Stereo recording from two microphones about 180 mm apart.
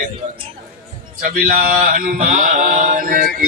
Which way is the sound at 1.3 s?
55° right (ahead or behind).